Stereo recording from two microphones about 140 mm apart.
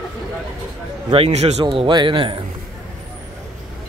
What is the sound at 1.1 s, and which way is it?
Speech, 50° right (ahead or behind).